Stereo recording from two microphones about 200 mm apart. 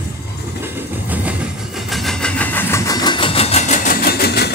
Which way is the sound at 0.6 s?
10° right (ahead or behind).